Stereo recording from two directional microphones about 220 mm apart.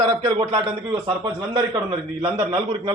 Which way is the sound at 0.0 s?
15° right (ahead or behind).